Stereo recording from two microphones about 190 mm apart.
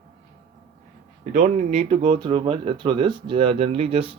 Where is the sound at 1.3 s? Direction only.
40° right (ahead or behind).